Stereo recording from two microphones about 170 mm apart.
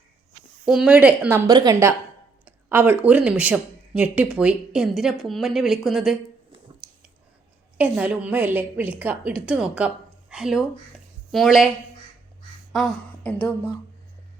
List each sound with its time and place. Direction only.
0.6 s a woman's voice: 5° right (ahead or behind)
1.5 s a woman's voice: 20° right (ahead or behind); by 6.1 s centre (ahead or behind)
7.8 s a woman's voice: 10° right (ahead or behind)
12.7 s speech: 5° left (ahead or behind)